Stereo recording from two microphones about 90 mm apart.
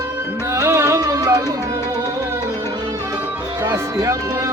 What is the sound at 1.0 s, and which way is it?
Music, 45° right (ahead or behind).